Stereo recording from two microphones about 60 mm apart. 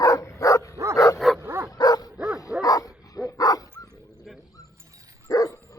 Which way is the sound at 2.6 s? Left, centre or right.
Left.